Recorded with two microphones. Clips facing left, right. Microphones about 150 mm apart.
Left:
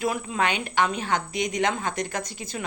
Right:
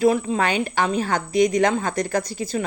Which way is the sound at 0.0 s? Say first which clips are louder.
Right 7 dB; 35° right (ahead or behind).